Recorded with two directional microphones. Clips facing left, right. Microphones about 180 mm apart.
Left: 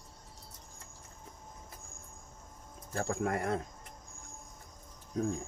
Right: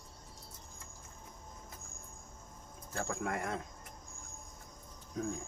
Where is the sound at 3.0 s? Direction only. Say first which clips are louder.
Left 4 dB; 35° left (ahead or behind).